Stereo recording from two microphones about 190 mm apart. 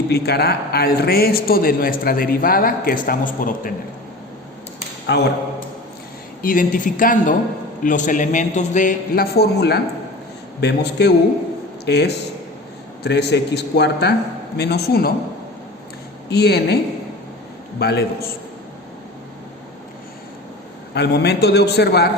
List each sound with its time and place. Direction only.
0.1 s a man's voice: 55° left (ahead or behind)
6.4 s a man's voice: 45° left (ahead or behind)
16.3 s a man's voice: 60° left (ahead or behind)
17.7 s a man's voice: 60° left (ahead or behind)
20.9 s a man's voice: 60° left (ahead or behind)